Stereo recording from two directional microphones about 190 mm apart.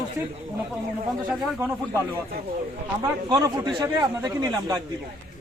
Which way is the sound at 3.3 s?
20° right (ahead or behind).